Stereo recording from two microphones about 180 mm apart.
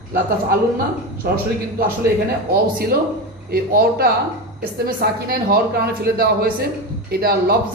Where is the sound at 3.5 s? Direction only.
55° right (ahead or behind).